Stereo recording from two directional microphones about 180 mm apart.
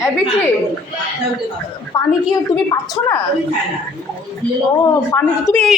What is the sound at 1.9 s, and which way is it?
Speech, 15° left (ahead or behind).